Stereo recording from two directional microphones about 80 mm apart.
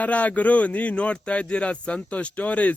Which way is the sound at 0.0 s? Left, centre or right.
Centre.